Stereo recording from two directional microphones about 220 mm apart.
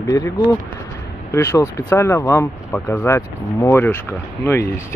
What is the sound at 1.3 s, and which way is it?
Speech, 15° left (ahead or behind).